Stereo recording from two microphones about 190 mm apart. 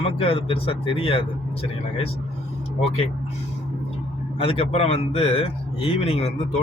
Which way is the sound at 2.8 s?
30° left (ahead or behind).